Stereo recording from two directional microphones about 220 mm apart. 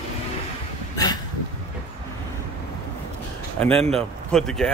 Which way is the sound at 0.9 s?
20° left (ahead or behind).